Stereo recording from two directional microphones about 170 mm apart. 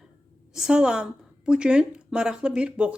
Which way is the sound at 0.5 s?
5° right (ahead or behind).